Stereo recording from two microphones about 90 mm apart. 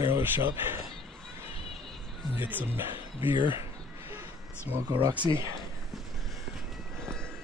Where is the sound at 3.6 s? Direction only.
30° right (ahead or behind).